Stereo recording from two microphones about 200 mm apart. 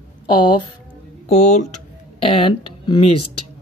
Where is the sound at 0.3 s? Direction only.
25° left (ahead or behind).